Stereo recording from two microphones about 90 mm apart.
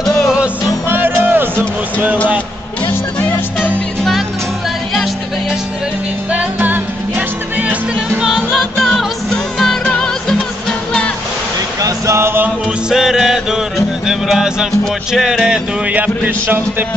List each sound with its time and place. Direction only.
0.8 s music: 25° right (ahead or behind)
3.2 s music: 15° left (ahead or behind)
6.3 s music: 20° right (ahead or behind)
8.2 s music: 5° right (ahead or behind)
8.7 s music: 5° left (ahead or behind)
11.8 s a sound: 30° right (ahead or behind)
12.9 s music: 5° right (ahead or behind); by 16.8 s 25° right (ahead or behind)